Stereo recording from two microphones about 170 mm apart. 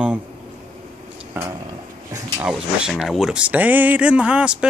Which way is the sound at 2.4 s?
5° right (ahead or behind).